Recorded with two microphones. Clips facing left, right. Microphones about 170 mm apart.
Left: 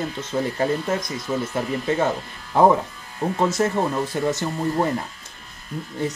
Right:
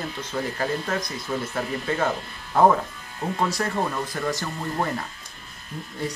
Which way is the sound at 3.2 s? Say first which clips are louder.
Left 5 dB; 25° left (ahead or behind).